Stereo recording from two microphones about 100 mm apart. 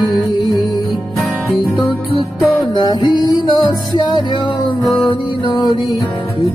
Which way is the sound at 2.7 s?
50° left (ahead or behind).